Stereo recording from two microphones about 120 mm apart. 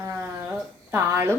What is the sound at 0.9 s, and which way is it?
Speech, 20° right (ahead or behind).